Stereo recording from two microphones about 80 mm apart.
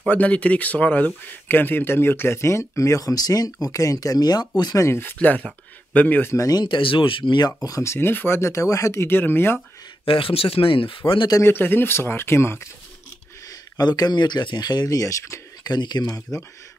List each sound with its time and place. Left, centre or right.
0.0 s speech: centre; by 4.5 s left
4.7 s speech: left
5.2 s speech: centre
6.3 s speech: left
6.6 s speech: left
7.8 s speech: left
10.7 s speech: left
11.4 s speech: left
13.7 s speech: left
15.6 s speech: left